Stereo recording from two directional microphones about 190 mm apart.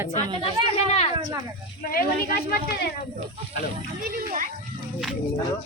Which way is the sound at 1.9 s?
50° left (ahead or behind).